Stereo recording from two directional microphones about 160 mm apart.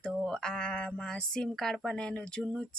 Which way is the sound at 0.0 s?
5° left (ahead or behind).